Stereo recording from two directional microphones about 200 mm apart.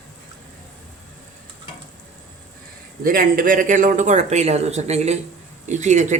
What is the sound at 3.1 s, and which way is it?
Speech, 45° right (ahead or behind).